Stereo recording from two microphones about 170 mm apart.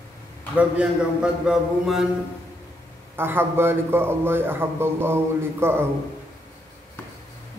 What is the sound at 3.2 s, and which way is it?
A man's voice, 15° right (ahead or behind).